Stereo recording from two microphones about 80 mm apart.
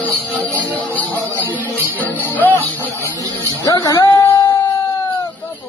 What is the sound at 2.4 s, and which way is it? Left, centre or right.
Music, left.